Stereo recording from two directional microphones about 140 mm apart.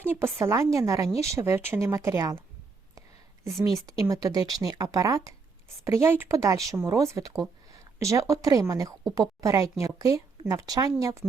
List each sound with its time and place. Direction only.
0.0 s speech: 15° right (ahead or behind)
3.4 s speech: 25° right (ahead or behind)